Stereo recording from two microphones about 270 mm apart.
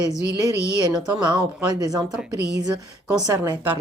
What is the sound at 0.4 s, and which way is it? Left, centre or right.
Speech, centre.